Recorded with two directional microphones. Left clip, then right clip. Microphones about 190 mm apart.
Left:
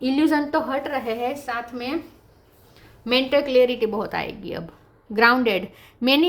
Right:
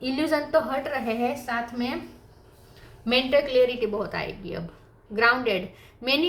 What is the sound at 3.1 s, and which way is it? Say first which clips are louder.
A woman's voice: left 2 dB; 55° left (ahead or behind).